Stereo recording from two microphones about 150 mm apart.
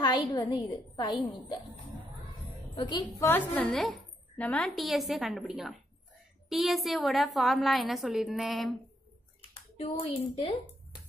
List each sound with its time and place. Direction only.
0.0 s a woman's voice: 30° left (ahead or behind)
2.7 s a woman's voice: 30° left (ahead or behind)
3.3 s a woman's voice: 10° left (ahead or behind)
9.8 s a child's voice: 45° left (ahead or behind)